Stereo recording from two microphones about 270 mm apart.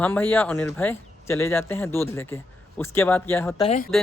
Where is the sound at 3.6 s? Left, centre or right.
Left.